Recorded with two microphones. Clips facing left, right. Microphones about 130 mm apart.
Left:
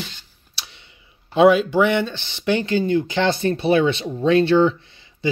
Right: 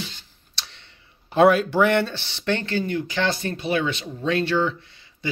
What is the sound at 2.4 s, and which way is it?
Speech, 10° left (ahead or behind).